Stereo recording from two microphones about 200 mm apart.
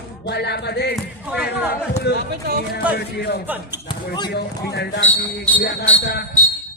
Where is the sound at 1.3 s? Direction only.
5° right (ahead or behind).